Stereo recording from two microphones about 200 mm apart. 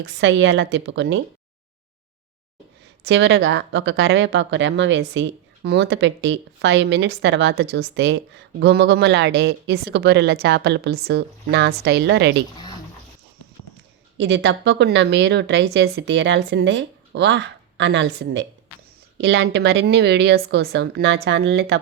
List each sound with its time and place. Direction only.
0.0 s speech: 65° right (ahead or behind)
3.1 s speech: 65° right (ahead or behind)
14.2 s speech: 65° right (ahead or behind)